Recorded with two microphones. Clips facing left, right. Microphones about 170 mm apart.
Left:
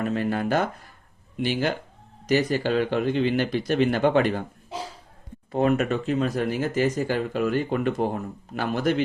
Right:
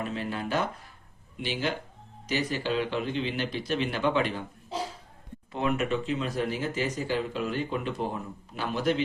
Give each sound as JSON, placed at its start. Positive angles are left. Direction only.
{"t": 0.0, "sound": "speech", "side_deg": 50}
{"t": 5.5, "sound": "speech", "side_deg": 45}